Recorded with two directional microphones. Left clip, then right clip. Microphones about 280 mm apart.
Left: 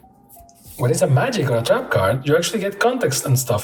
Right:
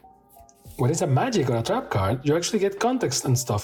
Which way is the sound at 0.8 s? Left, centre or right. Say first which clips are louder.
Left 6 dB; right.